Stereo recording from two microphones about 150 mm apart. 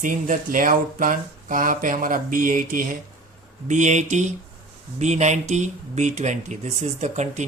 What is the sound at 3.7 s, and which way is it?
Speech, 55° right (ahead or behind).